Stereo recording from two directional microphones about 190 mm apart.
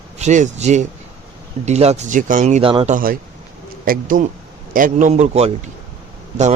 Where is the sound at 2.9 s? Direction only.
50° right (ahead or behind).